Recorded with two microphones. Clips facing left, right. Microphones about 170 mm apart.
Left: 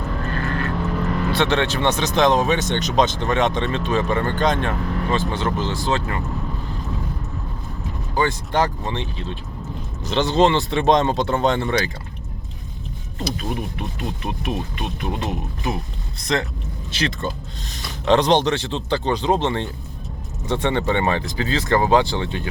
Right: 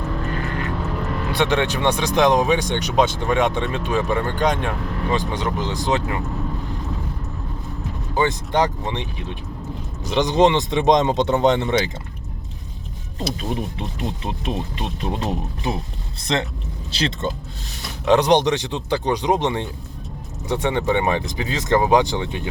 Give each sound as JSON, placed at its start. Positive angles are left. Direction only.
{"t": 0.3, "sound": "vehicle", "side_deg": -15}
{"t": 1.3, "sound": "speech", "side_deg": -15}
{"t": 8.1, "sound": "speech", "side_deg": -20}
{"t": 13.1, "sound": "speech", "side_deg": -25}
{"t": 17.7, "sound": "speech", "side_deg": -10}